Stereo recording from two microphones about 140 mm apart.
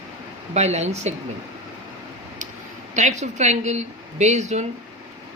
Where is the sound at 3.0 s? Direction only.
55° right (ahead or behind).